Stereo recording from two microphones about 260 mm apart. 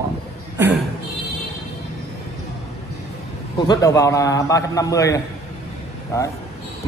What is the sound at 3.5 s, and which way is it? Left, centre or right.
A man's voice, centre.